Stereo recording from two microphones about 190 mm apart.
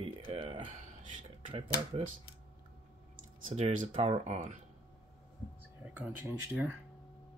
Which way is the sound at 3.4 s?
40° right (ahead or behind).